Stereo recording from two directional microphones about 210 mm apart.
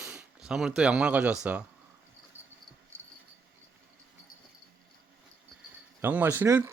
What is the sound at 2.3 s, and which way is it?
Cricket, 10° right (ahead or behind).